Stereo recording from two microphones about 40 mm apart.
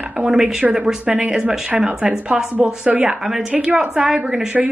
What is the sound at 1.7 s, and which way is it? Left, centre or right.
Speech, right.